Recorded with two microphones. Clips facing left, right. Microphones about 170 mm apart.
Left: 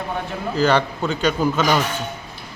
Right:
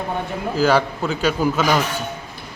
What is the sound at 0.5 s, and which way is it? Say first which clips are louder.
A man's voice: right 1 dB; 5° right (ahead or behind).